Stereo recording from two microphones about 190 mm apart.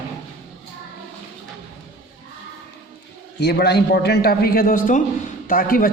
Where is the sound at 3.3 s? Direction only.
60° left (ahead or behind).